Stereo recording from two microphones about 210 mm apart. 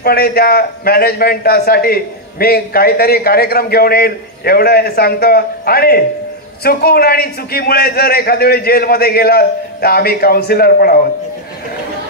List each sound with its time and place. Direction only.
0.0 s a man's voice: 45° left (ahead or behind)